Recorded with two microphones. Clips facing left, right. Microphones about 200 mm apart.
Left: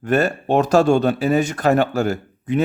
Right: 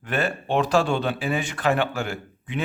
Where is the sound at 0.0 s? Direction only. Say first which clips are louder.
Left 7 dB; 45° left (ahead or behind).